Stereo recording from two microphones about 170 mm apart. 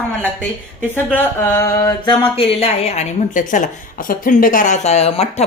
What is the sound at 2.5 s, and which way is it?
A woman's voice, 35° left (ahead or behind).